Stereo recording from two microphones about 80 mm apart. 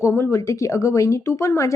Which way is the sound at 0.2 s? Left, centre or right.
Left.